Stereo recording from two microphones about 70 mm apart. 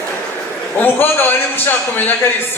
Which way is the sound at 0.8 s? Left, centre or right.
Left.